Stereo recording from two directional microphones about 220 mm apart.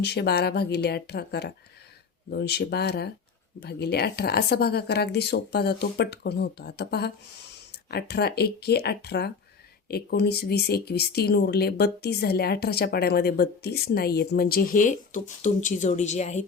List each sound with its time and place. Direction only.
0.0 s speech: 50° left (ahead or behind); by 16.5 s 30° left (ahead or behind)